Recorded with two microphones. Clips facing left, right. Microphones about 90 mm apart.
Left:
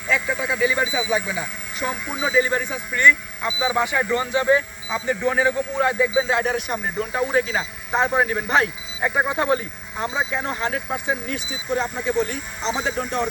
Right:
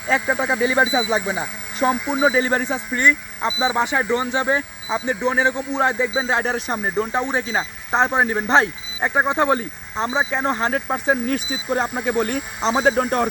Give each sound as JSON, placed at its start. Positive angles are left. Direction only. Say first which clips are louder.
{"t": 0.1, "sound": "speech", "louder": "right 3 dB", "side_deg": -35}
{"t": 3.0, "sound": "speech", "louder": "left 2 dB", "side_deg": -20}